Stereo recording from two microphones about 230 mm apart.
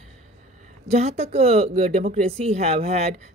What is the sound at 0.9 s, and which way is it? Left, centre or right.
Speech, right.